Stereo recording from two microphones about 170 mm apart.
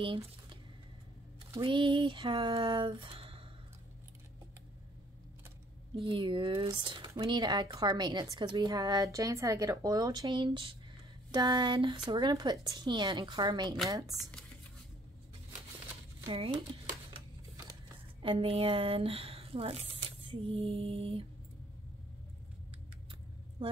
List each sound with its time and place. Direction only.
0.0 s speech: 30° right (ahead or behind)
5.9 s speech: 30° right (ahead or behind)
16.3 s speech: 30° right (ahead or behind)
18.2 s speech: 30° right (ahead or behind)
23.6 s vehicle: 25° right (ahead or behind)